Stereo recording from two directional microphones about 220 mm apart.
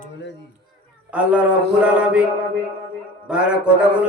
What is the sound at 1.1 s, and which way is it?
A man's voice, 5° right (ahead or behind).